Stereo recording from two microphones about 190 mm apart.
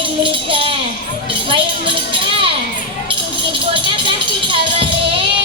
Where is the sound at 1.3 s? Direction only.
25° right (ahead or behind).